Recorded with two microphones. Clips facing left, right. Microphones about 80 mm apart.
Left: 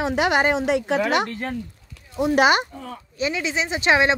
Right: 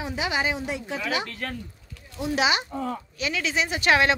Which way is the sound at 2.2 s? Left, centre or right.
Left.